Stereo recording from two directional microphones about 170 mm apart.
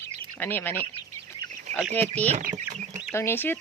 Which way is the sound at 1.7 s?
45° right (ahead or behind).